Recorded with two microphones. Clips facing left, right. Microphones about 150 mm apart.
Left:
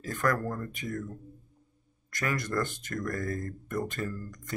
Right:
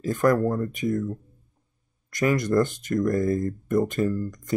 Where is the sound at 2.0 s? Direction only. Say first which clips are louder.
Right 10 dB; 15° right (ahead or behind).